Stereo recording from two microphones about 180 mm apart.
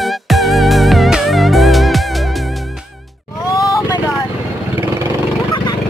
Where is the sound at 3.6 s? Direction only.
20° left (ahead or behind).